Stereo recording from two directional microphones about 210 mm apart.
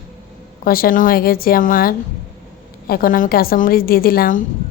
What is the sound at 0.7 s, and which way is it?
A woman's voice, 45° left (ahead or behind).